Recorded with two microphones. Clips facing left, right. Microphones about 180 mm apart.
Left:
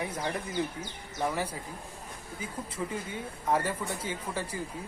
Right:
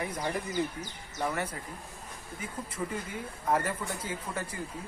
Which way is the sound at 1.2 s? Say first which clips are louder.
Left 1 dB; 5° left (ahead or behind).